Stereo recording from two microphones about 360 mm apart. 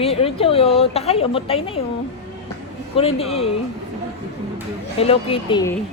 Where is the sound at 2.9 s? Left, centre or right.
Centre.